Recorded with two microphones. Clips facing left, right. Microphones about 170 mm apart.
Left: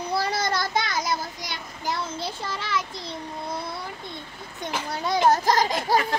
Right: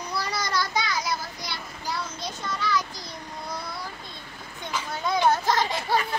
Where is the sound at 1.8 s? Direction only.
30° left (ahead or behind).